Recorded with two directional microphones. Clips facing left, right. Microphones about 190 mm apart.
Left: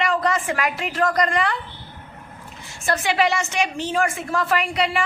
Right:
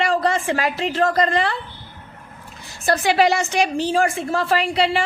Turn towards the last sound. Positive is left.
turn(degrees=-30)  # may be behind; listen again after turning